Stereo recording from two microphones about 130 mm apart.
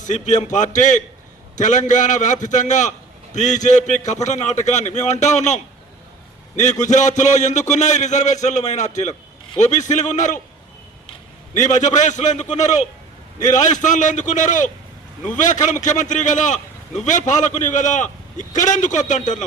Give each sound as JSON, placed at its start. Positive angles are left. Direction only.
{"t": 0.0, "sound": "a man's voice", "side_deg": 70}
{"t": 6.6, "sound": "a man's voice", "side_deg": 70}
{"t": 11.5, "sound": "a man's voice", "side_deg": 70}